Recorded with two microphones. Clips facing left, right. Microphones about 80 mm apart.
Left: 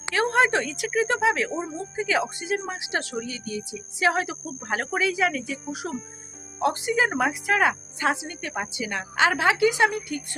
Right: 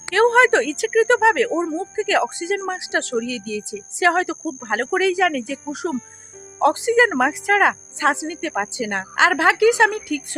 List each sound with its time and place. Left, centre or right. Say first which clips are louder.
0.1 s speech: right 7 dB; right
2.2 s a woman's voice: right 6 dB; right
4.4 s speech: right 6 dB; right
6.6 s speech: right 7 dB; right
7.1 s speech: right 5 dB; right
8.3 s a woman's voice: right 7 dB; right
8.6 s a woman's voice: right 6 dB; right
9.3 s speech: right 5 dB; right